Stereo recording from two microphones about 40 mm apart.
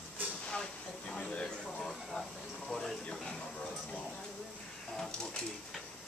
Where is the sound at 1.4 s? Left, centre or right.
Centre.